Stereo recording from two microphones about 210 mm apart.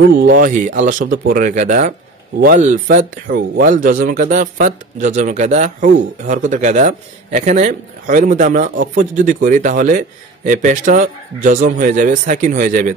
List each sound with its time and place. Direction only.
0.3 s a man's voice: 40° right (ahead or behind)